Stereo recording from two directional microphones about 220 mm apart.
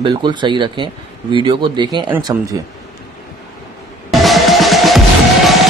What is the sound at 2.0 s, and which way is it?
Speech, 10° right (ahead or behind).